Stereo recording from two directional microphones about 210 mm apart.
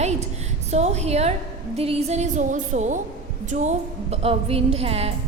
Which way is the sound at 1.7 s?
30° right (ahead or behind).